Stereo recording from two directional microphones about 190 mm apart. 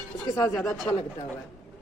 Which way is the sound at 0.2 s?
15° left (ahead or behind).